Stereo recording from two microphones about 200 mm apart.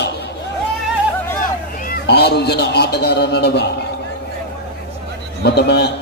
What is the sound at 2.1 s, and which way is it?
A man's voice, 55° left (ahead or behind).